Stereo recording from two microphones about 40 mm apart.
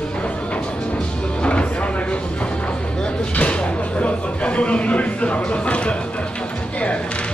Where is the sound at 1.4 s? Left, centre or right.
Left.